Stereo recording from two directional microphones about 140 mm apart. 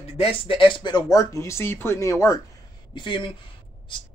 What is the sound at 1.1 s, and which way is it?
Speech, 20° left (ahead or behind).